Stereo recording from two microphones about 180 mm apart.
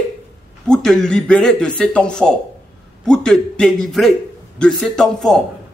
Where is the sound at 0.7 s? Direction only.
5° left (ahead or behind).